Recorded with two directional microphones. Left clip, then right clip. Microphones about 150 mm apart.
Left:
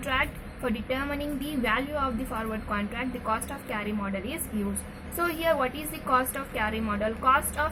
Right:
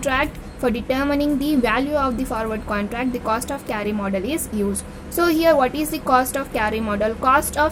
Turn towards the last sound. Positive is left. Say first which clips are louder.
# right 7 dB
turn(degrees=-90)